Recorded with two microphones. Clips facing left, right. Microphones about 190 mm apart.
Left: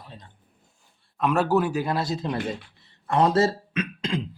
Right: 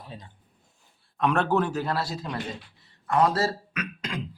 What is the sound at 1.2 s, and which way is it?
A man's voice, 5° left (ahead or behind).